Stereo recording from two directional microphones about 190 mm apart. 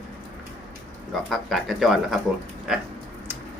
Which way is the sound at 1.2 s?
Centre (ahead or behind).